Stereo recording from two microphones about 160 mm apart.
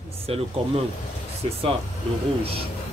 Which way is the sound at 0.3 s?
40° right (ahead or behind).